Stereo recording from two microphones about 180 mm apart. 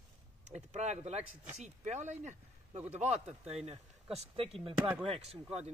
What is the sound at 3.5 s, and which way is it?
Speech, 35° right (ahead or behind).